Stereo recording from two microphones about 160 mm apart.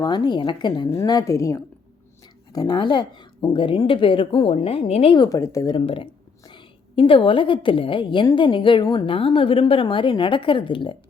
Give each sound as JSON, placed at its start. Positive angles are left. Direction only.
{"t": 0.0, "sound": "a woman's voice", "side_deg": 25}
{"t": 5.1, "sound": "a woman's voice", "side_deg": 25}
{"t": 5.7, "sound": "a woman's voice", "side_deg": 35}